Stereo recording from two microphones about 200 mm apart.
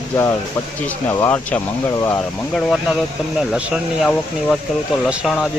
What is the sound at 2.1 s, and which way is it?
Speech, centre (ahead or behind).